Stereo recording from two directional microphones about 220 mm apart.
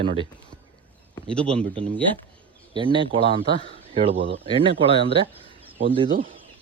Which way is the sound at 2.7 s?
25° right (ahead or behind).